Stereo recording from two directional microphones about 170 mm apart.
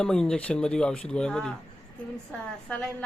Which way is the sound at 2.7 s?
5° left (ahead or behind).